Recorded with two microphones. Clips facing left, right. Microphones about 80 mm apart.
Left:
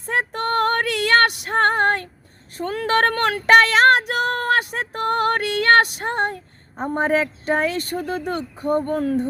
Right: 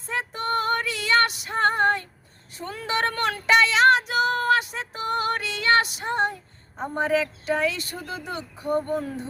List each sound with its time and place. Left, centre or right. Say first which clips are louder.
0.0 s female singing: left 6 dB; left